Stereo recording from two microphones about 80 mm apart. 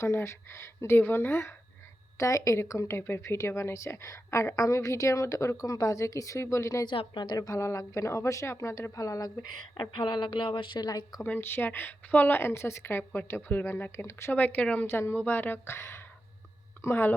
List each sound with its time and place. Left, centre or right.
0.0 s a woman's voice: left
6.8 s a woman's voice: left
7.3 s a woman's voice: left
9.9 s speech: left
10.8 s a woman's voice: left
11.3 s a woman's voice: left
14.3 s a woman's voice: centre
14.8 s a woman's voice: left